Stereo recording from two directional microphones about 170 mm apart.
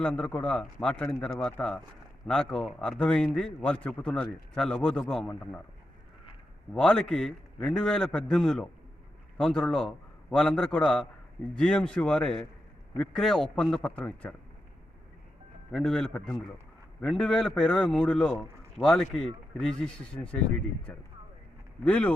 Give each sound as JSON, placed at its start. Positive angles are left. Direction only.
{"t": 0.0, "sound": "a man's voice", "side_deg": 10}
{"t": 6.7, "sound": "a man's voice", "side_deg": 5}
{"t": 15.7, "sound": "a man's voice", "side_deg": 0}
{"t": 20.2, "sound": "speech", "side_deg": 20}
{"t": 21.8, "sound": "a man's voice", "side_deg": 5}